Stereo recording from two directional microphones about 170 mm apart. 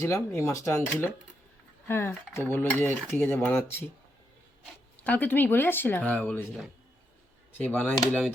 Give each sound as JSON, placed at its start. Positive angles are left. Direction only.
{"t": 0.0, "sound": "cutlery", "side_deg": 15}
{"t": 4.9, "sound": "cutlery", "side_deg": 10}
{"t": 7.6, "sound": "cutlery", "side_deg": 10}